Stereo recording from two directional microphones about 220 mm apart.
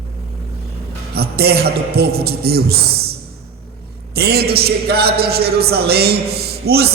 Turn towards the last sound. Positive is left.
turn(degrees=-45)  # may be behind; listen again after turning